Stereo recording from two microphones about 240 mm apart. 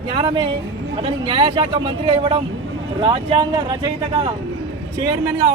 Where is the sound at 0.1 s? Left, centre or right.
Right.